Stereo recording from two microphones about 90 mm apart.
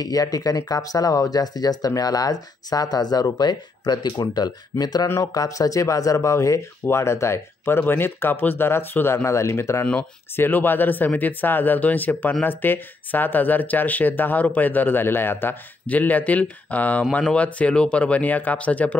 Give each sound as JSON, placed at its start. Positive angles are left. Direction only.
{"t": 0.0, "sound": "speech", "side_deg": 45}
{"t": 5.0, "sound": "speech", "side_deg": 35}